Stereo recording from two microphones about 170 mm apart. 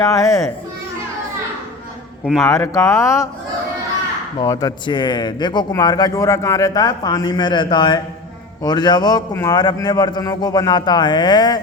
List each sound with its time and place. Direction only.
0.0 s speech: 20° left (ahead or behind)
2.4 s speech: 15° left (ahead or behind)
4.4 s speech: 20° left (ahead or behind)